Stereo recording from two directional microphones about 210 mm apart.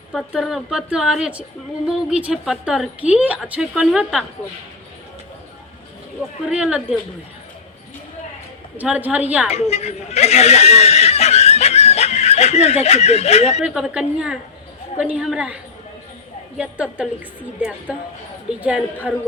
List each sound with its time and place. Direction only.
0.1 s a woman's voice: centre (ahead or behind)
6.5 s a woman's voice: 5° right (ahead or behind)
8.8 s a woman's voice: 5° right (ahead or behind)
9.5 s speech: 30° left (ahead or behind)
13.6 s a woman's voice: 5° right (ahead or behind)
16.6 s a woman's voice: 5° right (ahead or behind)